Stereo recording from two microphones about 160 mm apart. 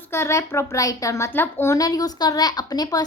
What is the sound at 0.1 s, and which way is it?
A woman's voice, 15° left (ahead or behind).